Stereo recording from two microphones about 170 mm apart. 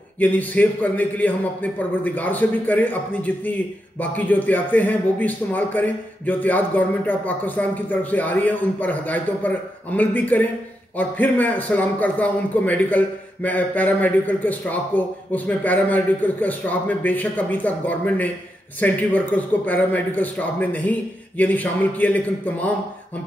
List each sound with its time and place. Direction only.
0.2 s a man's voice: 10° left (ahead or behind)